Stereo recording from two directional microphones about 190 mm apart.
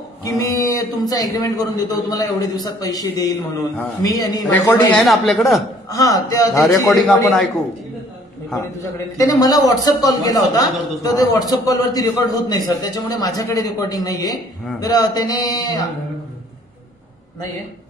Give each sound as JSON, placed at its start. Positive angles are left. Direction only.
{"t": 0.2, "sound": "a man's voice", "side_deg": 15}
{"t": 4.5, "sound": "speech", "side_deg": 10}
{"t": 5.9, "sound": "a man's voice", "side_deg": 20}
{"t": 9.2, "sound": "a man's voice", "side_deg": 20}